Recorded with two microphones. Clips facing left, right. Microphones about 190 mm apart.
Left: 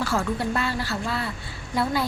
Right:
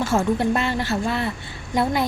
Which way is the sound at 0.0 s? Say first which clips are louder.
Right 5 dB; 25° right (ahead or behind).